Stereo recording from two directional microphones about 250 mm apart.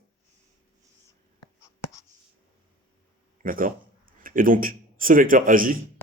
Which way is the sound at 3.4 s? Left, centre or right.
Right.